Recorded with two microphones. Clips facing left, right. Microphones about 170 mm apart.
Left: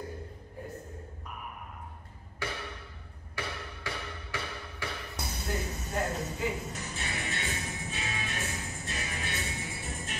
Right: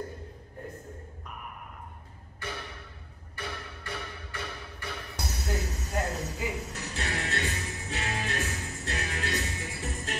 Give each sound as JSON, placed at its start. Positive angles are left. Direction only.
{"t": 2.4, "sound": "music", "side_deg": 90}
{"t": 5.1, "sound": "music", "side_deg": -75}